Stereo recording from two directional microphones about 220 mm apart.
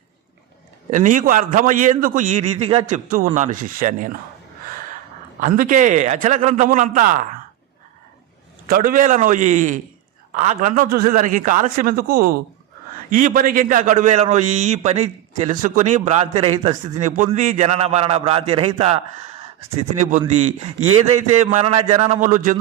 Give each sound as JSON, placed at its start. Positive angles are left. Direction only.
{"t": 0.9, "sound": "a man's voice", "side_deg": -35}
{"t": 5.4, "sound": "a man's voice", "side_deg": -35}
{"t": 8.7, "sound": "a man's voice", "side_deg": -40}
{"t": 22.2, "sound": "a man's voice", "side_deg": -35}